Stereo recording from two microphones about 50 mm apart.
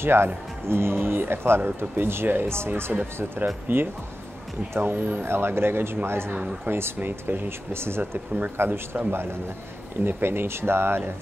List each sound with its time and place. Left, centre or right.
0.0 s speech: right
2.9 s speech: right
3.6 s speech: right